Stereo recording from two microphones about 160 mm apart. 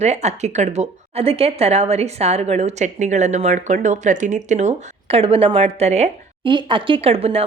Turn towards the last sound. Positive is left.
turn(degrees=-40)  # may be behind; listen again after turning